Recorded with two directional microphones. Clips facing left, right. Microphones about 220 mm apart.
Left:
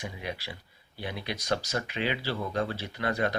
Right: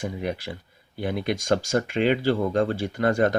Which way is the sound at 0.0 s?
50° right (ahead or behind).